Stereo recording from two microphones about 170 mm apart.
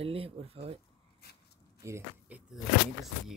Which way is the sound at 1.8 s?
15° right (ahead or behind).